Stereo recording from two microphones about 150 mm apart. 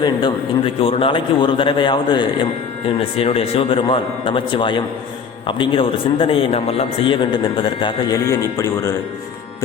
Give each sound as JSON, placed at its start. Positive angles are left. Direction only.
{"t": 0.0, "sound": "a man's voice", "side_deg": 30}